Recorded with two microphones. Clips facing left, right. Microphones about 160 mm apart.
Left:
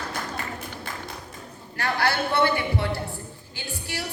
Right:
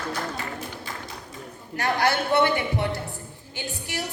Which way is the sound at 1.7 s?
20° right (ahead or behind).